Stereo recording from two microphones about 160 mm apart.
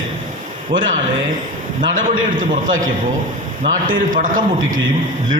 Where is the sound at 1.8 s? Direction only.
55° right (ahead or behind).